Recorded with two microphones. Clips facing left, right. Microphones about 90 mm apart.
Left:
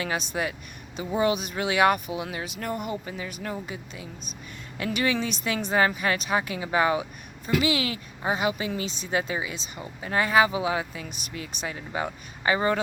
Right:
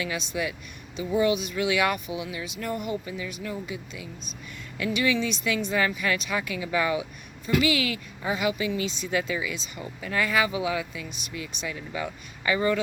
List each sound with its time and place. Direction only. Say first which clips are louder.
0.0 s a woman's voice: left 1 dB; 40° left (ahead or behind)